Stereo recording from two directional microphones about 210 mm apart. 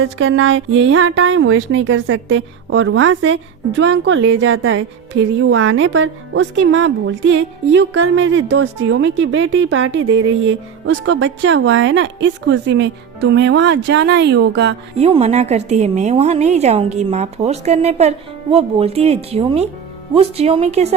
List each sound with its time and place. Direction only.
0.0 s speech: 65° right (ahead or behind)
14.9 s a woman's voice: 30° right (ahead or behind)